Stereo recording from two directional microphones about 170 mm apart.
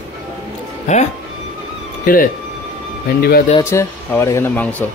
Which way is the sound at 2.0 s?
55° left (ahead or behind).